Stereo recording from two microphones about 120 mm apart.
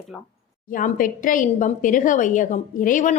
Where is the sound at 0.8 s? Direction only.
90° left.